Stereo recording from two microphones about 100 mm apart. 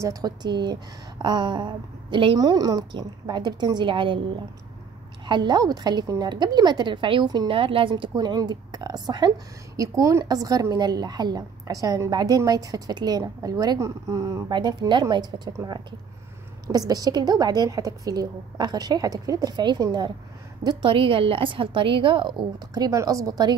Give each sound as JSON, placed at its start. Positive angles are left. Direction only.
{"t": 0.0, "sound": "a woman's voice", "side_deg": -40}
{"t": 2.3, "sound": "a woman's voice", "side_deg": -40}
{"t": 5.2, "sound": "a woman's voice", "side_deg": -50}
{"t": 7.5, "sound": "a woman's voice", "side_deg": -60}
{"t": 8.1, "sound": "a woman's voice", "side_deg": -40}
{"t": 9.8, "sound": "a woman's voice", "side_deg": -35}
{"t": 14.5, "sound": "a woman's voice", "side_deg": -45}
{"t": 16.6, "sound": "a woman's voice", "side_deg": -40}
{"t": 20.6, "sound": "a woman's voice", "side_deg": -60}
{"t": 22.8, "sound": "a woman's voice", "side_deg": -35}